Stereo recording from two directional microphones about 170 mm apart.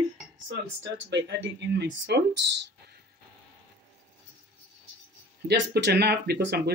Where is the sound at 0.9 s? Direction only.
90° right.